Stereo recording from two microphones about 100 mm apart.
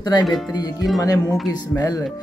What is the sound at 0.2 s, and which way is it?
Speech, 5° right (ahead or behind).